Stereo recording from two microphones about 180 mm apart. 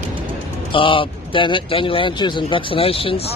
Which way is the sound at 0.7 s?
30° left (ahead or behind).